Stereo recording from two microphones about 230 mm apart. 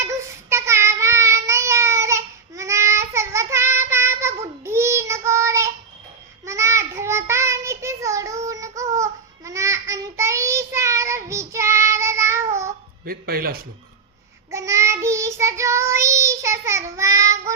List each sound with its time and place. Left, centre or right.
0.0 s child singing: centre
13.1 s music: right
14.5 s child singing: centre